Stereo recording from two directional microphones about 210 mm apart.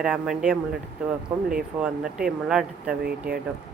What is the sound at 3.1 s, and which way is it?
Speech, 45° right (ahead or behind).